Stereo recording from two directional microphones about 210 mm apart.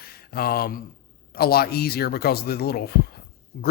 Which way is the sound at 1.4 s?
45° left (ahead or behind).